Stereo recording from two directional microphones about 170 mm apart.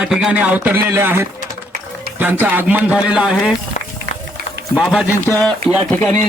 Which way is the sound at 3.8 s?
45° left (ahead or behind).